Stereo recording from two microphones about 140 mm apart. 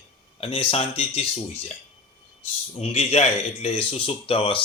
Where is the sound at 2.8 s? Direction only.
50° left (ahead or behind).